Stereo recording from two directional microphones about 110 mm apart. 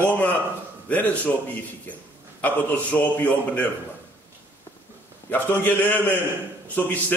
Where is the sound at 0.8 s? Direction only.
15° left (ahead or behind).